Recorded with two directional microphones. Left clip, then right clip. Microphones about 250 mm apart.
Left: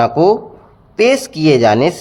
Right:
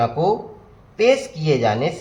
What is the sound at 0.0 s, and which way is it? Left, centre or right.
Speech, left.